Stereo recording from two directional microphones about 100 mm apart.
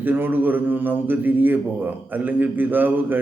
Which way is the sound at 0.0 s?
20° right (ahead or behind).